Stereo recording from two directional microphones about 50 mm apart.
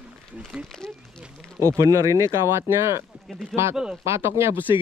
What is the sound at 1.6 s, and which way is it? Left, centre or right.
Speech, right.